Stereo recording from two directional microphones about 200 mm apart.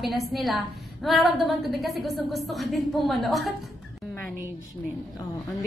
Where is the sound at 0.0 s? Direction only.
Centre (ahead or behind).